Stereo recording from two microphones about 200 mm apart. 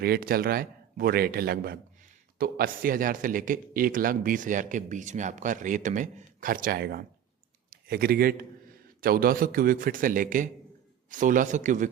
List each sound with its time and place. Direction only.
0.0 s a man's voice: 50° right (ahead or behind)